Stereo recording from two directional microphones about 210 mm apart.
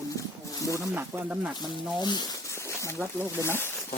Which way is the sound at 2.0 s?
20° left (ahead or behind).